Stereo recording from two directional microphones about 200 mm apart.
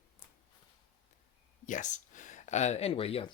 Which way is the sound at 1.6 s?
40° left (ahead or behind).